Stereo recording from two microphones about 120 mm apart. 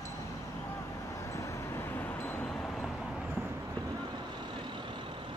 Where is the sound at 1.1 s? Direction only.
25° left (ahead or behind); by 3.3 s centre (ahead or behind).